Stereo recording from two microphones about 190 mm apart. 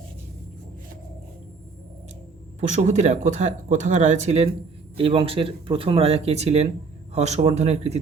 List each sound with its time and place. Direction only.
2.6 s speech: 40° right (ahead or behind)